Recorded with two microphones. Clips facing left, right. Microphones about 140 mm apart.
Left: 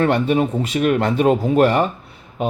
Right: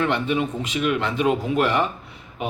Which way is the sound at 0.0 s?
45° left (ahead or behind).